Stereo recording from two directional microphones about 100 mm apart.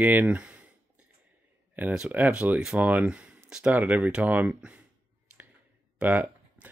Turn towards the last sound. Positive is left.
turn(degrees=-15)  # may be behind; listen again after turning